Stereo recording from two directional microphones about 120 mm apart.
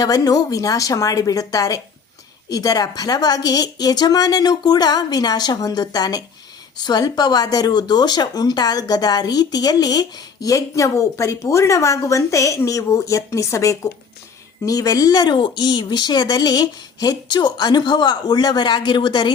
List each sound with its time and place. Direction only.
0.0 s a woman's voice: 30° left (ahead or behind)